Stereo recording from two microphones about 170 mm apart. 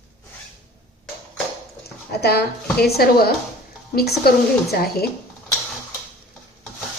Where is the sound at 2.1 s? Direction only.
70° left (ahead or behind).